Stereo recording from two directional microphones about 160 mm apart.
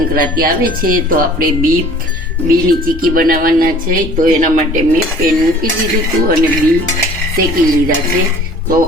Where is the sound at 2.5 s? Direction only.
65° right (ahead or behind).